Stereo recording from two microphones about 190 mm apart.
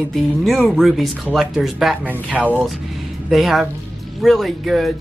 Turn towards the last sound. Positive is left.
turn(degrees=0)  # may be behind; listen again after turning